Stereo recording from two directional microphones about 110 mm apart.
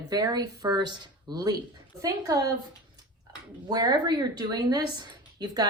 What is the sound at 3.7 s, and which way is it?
A woman's voice, 40° right (ahead or behind).